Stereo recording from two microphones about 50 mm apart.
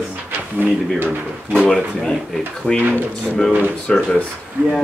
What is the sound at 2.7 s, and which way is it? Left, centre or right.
Speech, centre.